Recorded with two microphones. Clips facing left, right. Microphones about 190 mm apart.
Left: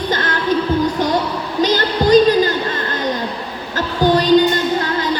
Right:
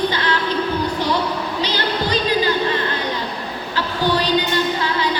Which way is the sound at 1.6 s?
45° left (ahead or behind).